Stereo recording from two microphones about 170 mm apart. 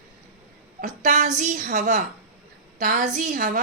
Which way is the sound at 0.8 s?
50° right (ahead or behind).